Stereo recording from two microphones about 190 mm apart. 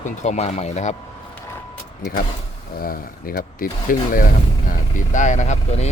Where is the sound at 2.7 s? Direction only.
50° left (ahead or behind).